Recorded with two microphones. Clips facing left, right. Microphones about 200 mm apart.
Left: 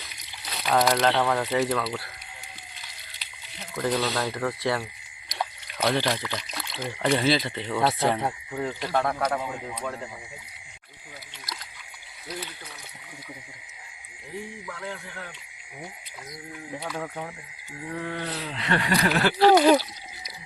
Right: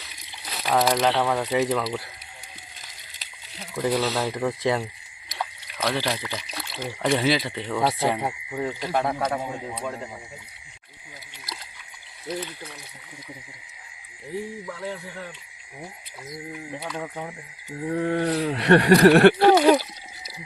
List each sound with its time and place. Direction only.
0.5 s speech: 5° right (ahead or behind)
1.5 s speech: 15° right (ahead or behind)
3.8 s speech: 10° right (ahead or behind)
5.4 s speech: centre (ahead or behind); by 10.1 s 15° right (ahead or behind)
14.7 s music: 25° right (ahead or behind)
16.8 s speech: 5° right (ahead or behind)
17.7 s a sound: 40° right (ahead or behind)
18.5 s speech: 70° right (ahead or behind)
19.5 s speech: 5° right (ahead or behind)